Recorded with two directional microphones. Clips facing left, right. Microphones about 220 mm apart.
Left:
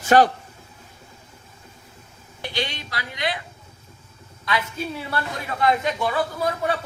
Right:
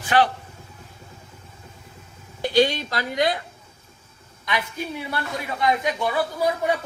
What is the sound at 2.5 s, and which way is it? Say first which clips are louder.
Speech: right 11 dB; 45° right (ahead or behind).